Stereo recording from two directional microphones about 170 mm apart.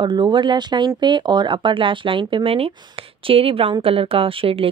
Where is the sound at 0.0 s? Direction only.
25° right (ahead or behind).